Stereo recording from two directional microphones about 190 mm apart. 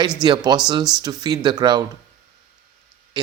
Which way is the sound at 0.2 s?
20° right (ahead or behind).